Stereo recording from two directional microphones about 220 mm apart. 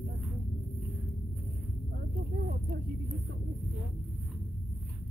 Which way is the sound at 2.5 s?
40° right (ahead or behind).